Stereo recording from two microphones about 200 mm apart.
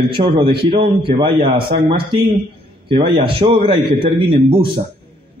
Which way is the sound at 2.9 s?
25° right (ahead or behind).